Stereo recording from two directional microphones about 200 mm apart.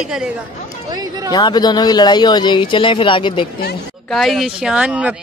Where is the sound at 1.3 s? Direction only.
20° left (ahead or behind).